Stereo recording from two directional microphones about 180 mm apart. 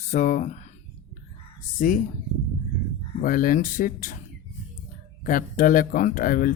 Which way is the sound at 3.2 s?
50° left (ahead or behind).